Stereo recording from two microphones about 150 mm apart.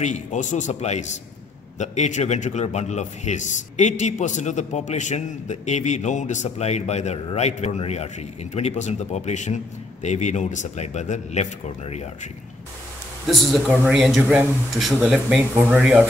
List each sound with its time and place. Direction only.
0.0 s a man's voice: 55° left (ahead or behind)
13.3 s speech: centre (ahead or behind)